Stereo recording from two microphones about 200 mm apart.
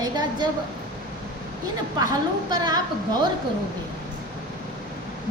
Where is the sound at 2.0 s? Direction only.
20° right (ahead or behind).